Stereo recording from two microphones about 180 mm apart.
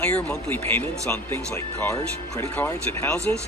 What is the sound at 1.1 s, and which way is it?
Speech, 15° left (ahead or behind).